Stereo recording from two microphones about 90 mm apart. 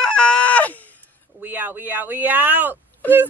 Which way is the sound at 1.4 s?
20° right (ahead or behind).